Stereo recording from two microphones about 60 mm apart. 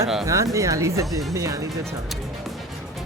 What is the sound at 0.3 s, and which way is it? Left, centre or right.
Speech, right.